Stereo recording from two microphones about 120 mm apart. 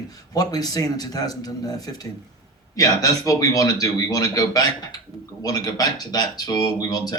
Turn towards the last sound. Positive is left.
turn(degrees=30)  # may be behind; listen again after turning